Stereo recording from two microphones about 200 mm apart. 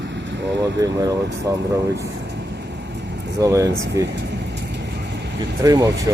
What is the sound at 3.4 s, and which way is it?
Speech, 15° right (ahead or behind).